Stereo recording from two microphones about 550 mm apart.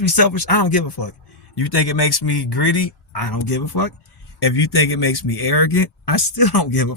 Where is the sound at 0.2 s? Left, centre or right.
Left.